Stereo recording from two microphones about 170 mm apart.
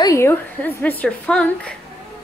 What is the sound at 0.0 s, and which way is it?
A woman's voice, 15° left (ahead or behind).